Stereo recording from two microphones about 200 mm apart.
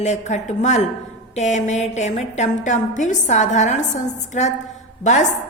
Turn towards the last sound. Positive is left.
turn(degrees=35)  # may be behind; listen again after turning